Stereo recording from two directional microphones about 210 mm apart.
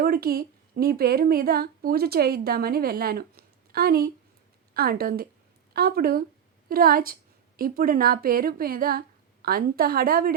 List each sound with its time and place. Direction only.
0.0 s a woman's voice: 45° right (ahead or behind)